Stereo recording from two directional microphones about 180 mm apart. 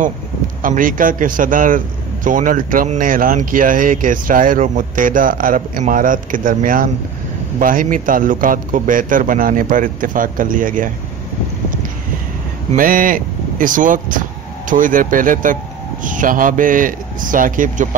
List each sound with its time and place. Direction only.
0.6 s speech: 50° right (ahead or behind)
12.7 s speech: 50° right (ahead or behind)